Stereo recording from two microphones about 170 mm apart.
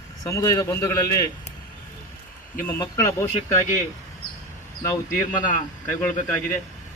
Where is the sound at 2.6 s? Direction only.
15° left (ahead or behind).